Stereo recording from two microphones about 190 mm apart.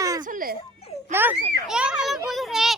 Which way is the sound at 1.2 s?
10° right (ahead or behind).